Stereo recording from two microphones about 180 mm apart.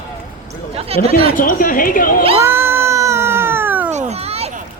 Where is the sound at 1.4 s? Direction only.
50° left (ahead or behind).